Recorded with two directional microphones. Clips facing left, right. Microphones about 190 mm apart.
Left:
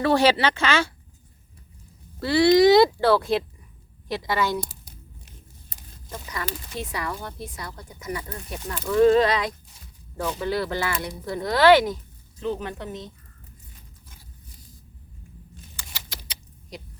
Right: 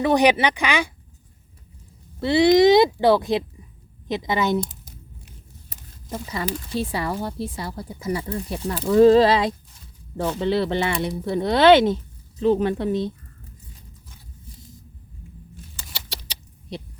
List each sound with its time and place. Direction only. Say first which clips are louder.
0.0 s speech: right 2 dB; 15° right (ahead or behind)
2.2 s speech: right 1 dB; 20° right (ahead or behind)
6.7 s speech: right 6 dB; 30° right (ahead or behind)